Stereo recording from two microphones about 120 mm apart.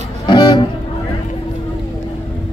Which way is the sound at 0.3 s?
40° left (ahead or behind).